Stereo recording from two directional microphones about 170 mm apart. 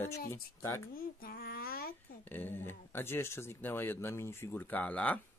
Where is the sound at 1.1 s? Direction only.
60° left (ahead or behind).